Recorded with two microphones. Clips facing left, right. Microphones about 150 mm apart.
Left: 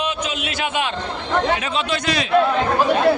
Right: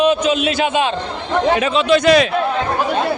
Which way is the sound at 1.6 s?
85° right.